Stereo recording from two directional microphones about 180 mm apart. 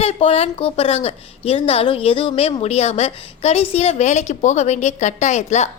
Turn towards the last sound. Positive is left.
turn(degrees=40)  # may be behind; listen again after turning